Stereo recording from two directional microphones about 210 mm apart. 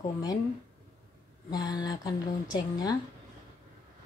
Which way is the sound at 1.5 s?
20° left (ahead or behind).